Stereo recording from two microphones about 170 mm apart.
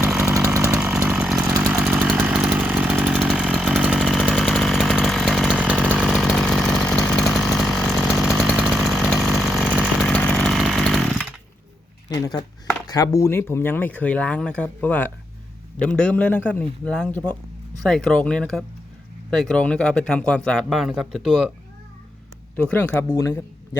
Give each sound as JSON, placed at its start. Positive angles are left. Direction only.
{"t": 0.3, "sound": "chainsaw", "side_deg": -15}
{"t": 1.1, "sound": "chainsaw", "side_deg": 0}
{"t": 1.5, "sound": "chainsaw", "side_deg": -15}
{"t": 12.1, "sound": "a sound", "side_deg": 20}
{"t": 12.9, "sound": "speech", "side_deg": 20}
{"t": 22.5, "sound": "speech", "side_deg": 10}